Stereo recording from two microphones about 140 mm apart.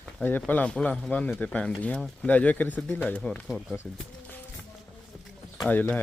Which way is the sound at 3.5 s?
Centre (ahead or behind).